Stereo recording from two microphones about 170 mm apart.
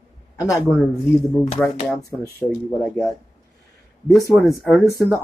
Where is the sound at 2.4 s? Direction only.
5° left (ahead or behind).